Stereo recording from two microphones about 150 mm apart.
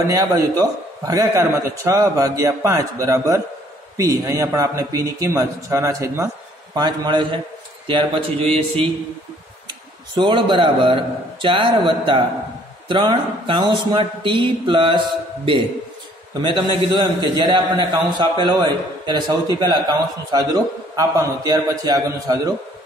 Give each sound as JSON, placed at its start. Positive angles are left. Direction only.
{"t": 0.0, "sound": "a man's voice", "side_deg": -25}
{"t": 10.1, "sound": "speech", "side_deg": -30}
{"t": 16.3, "sound": "a man's voice", "side_deg": -30}